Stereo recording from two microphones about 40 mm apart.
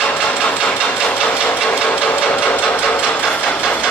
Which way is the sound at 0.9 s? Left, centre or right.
Left.